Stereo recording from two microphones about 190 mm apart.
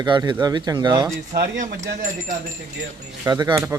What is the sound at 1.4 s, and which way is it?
Speech, 45° right (ahead or behind).